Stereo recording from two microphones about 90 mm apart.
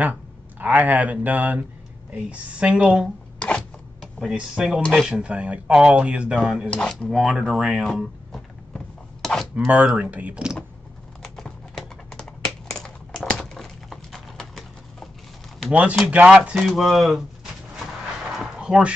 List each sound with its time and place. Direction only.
0.0 s a woman's voice: 20° right (ahead or behind)
3.3 s zipper: 15° left (ahead or behind)
4.2 s a woman's voice: 5° right (ahead or behind)
6.7 s speech: 10° left (ahead or behind); by 7.8 s 10° right (ahead or behind)
7.8 s a sound: centre (ahead or behind)
9.8 s a woman's voice: 15° right (ahead or behind)
11.2 s typing: 5° left (ahead or behind)
15.7 s a woman's voice: 15° right (ahead or behind); by 17.2 s centre (ahead or behind)
18.4 s a sound: 10° right (ahead or behind)